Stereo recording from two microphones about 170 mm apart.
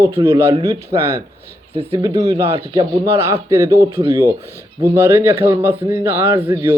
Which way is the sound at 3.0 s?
15° right (ahead or behind).